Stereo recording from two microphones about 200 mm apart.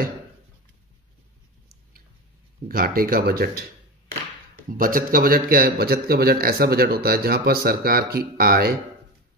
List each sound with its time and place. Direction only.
2.7 s a man's voice: 50° right (ahead or behind)
4.7 s a man's voice: 45° right (ahead or behind)